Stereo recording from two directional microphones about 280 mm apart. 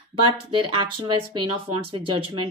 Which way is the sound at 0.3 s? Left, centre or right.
Centre.